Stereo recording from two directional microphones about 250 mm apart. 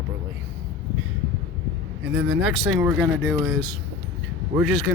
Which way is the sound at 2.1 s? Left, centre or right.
Right.